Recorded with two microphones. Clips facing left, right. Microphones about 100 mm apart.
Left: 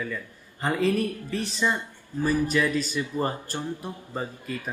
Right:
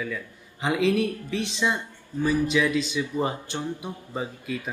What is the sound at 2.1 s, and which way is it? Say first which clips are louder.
Speech: right 1 dB; 20° right (ahead or behind).